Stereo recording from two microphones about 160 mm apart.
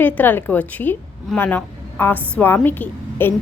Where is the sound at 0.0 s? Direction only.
10° left (ahead or behind).